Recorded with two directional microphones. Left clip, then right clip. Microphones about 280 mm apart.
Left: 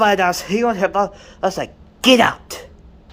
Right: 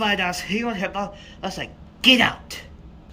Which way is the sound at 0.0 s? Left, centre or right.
Centre.